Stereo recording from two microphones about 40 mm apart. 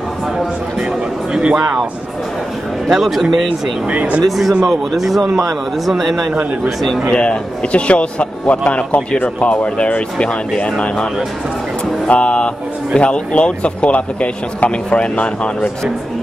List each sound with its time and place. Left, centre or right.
1.3 s speech: right
2.9 s speech: centre
3.8 s speech: right
4.2 s speech: centre
7.2 s a man's voice: left
10.1 s a man's voice: left